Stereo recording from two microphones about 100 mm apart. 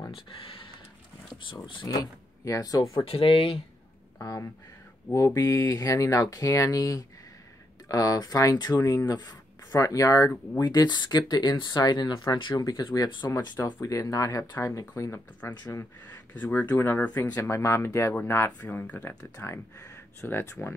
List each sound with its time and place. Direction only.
0.1 s speech: 60° left (ahead or behind)
1.7 s speech: 55° left (ahead or behind)
2.0 s speech: 35° left (ahead or behind)
3.1 s speech: 70° left (ahead or behind)
4.2 s speech: 35° left (ahead or behind)
16.1 s speech: 15° left (ahead or behind)
17.4 s speech: 30° left (ahead or behind)